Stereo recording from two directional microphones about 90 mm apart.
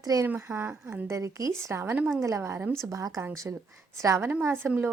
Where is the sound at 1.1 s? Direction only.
35° right (ahead or behind).